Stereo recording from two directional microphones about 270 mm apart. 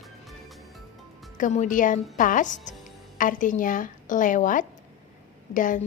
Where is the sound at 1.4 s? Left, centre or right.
Left.